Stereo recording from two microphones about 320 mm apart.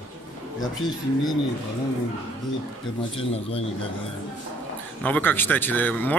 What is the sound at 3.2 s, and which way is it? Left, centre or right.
Speech, centre.